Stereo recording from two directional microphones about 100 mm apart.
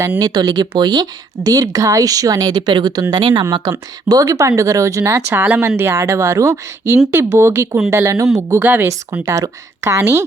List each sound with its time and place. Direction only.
0.2 s a woman's voice: 45° right (ahead or behind); by 8.9 s 20° right (ahead or behind)
9.2 s a woman's voice: 35° right (ahead or behind)